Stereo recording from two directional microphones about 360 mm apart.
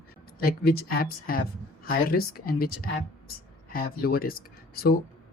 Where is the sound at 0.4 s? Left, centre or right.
Left.